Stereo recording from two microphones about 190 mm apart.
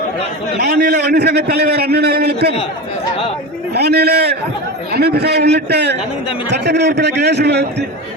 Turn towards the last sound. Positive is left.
turn(degrees=-65)  # may be behind; listen again after turning